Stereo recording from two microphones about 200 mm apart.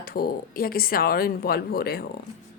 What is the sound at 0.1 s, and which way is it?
A woman's voice, 45° left (ahead or behind).